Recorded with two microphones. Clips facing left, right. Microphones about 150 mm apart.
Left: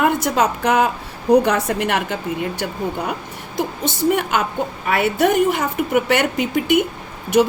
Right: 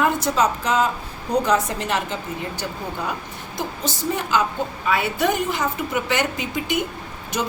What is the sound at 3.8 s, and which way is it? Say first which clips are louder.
A woman's voice: left 8 dB; 60° left (ahead or behind).